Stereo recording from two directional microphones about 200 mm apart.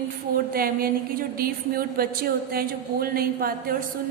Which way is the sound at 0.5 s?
45° right (ahead or behind).